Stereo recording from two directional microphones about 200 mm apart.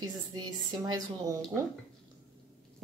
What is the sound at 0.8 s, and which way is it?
Speech, 20° right (ahead or behind).